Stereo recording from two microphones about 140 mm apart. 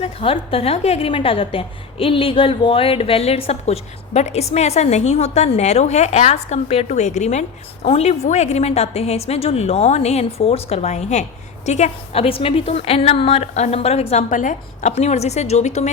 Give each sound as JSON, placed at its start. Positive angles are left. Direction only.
{"t": 0.0, "sound": "a woman's voice", "side_deg": 40}